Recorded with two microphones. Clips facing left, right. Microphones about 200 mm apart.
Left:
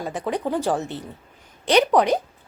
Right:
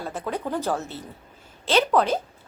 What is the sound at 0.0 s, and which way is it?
A woman's voice, 15° left (ahead or behind).